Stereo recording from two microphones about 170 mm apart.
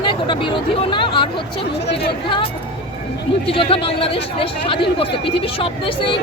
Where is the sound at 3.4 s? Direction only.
35° left (ahead or behind).